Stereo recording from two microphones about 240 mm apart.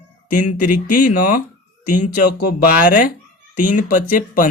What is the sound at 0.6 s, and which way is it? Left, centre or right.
Speech, left.